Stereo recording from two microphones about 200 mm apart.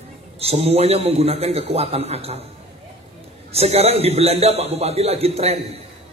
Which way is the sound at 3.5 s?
30° right (ahead or behind).